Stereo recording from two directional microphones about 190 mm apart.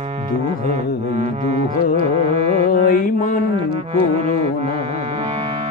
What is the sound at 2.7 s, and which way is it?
Music, 45° left (ahead or behind).